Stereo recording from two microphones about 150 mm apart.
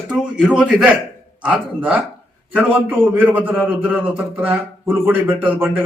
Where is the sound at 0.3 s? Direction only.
5° right (ahead or behind).